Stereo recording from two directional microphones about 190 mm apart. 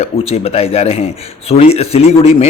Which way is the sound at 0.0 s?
30° left (ahead or behind).